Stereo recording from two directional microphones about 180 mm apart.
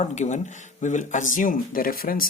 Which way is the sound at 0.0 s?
40° left (ahead or behind).